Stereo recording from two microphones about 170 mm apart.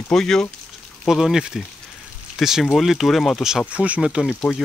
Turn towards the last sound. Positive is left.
turn(degrees=5)  # may be behind; listen again after turning